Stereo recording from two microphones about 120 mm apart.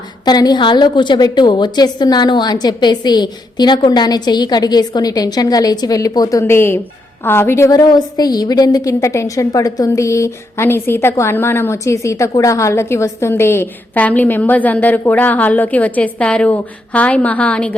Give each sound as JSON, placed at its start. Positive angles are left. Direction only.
{"t": 0.3, "sound": "a woman's voice", "side_deg": 35}